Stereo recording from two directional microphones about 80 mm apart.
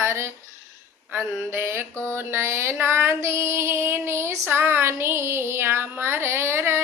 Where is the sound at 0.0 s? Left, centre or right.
Right.